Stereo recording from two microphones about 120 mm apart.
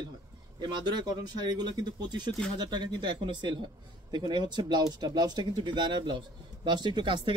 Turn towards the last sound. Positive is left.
turn(degrees=-40)  # may be behind; listen again after turning